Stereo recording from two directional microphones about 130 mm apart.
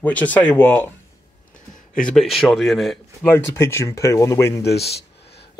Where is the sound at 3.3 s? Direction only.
20° left (ahead or behind).